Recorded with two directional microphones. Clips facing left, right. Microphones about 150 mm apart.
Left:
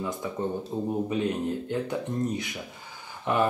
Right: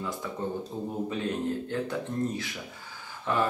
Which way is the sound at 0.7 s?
20° left (ahead or behind).